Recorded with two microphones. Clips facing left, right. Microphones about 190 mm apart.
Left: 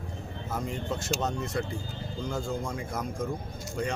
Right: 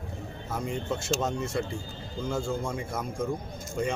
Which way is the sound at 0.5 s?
Centre (ahead or behind).